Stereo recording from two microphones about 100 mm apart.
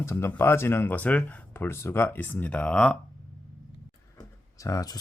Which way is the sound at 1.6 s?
25° left (ahead or behind).